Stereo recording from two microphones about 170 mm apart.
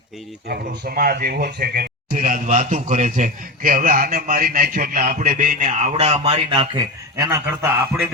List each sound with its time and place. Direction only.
0.4 s speech: 70° right (ahead or behind); by 6.8 s 30° right (ahead or behind)
7.2 s a man's voice: 15° right (ahead or behind)